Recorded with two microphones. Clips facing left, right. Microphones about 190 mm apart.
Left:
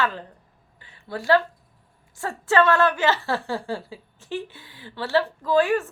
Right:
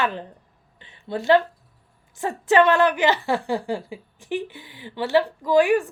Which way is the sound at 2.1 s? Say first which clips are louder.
Right 3 dB; 20° right (ahead or behind).